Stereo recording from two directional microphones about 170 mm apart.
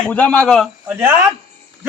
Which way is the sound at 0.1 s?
10° left (ahead or behind).